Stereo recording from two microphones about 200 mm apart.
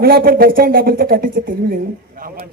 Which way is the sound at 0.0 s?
50° right (ahead or behind).